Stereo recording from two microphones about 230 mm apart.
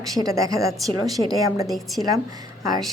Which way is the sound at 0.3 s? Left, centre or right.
Centre.